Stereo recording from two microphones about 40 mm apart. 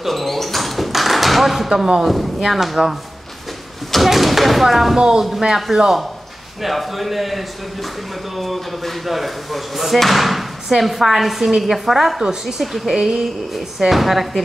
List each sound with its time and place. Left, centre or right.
0.0 s door: centre
2.0 s speech: centre
4.9 s speech: centre
5.5 s speech: centre